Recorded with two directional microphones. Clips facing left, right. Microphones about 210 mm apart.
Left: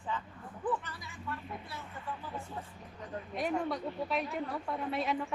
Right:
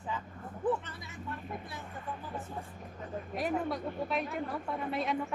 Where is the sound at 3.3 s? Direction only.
Centre (ahead or behind).